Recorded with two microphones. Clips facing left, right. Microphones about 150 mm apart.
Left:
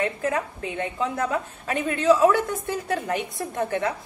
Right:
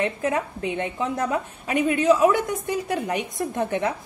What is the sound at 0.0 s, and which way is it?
A woman's voice, 20° right (ahead or behind).